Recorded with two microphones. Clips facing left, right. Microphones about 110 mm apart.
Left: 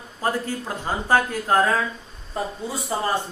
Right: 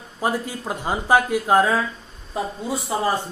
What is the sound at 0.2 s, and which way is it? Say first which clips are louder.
Speech: right 1 dB; 15° right (ahead or behind).